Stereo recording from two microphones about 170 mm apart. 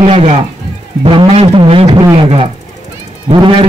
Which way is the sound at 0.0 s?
35° right (ahead or behind).